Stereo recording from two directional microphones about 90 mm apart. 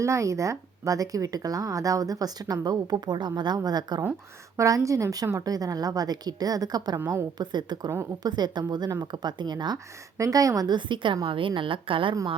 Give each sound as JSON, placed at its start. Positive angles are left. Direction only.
{"t": 0.0, "sound": "speech", "side_deg": -35}
{"t": 4.5, "sound": "speech", "side_deg": -35}
{"t": 10.2, "sound": "a woman's voice", "side_deg": -40}
{"t": 10.8, "sound": "a woman's voice", "side_deg": -60}